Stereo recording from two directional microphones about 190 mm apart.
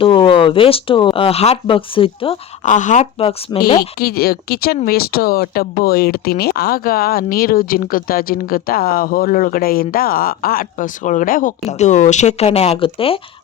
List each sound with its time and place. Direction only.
0.0 s speech: 25° left (ahead or behind)
2.6 s speech: 40° left (ahead or behind)
3.9 s speech: 55° left (ahead or behind); by 13.1 s 30° left (ahead or behind)